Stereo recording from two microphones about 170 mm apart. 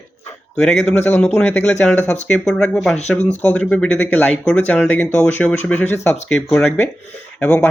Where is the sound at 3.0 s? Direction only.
40° left (ahead or behind).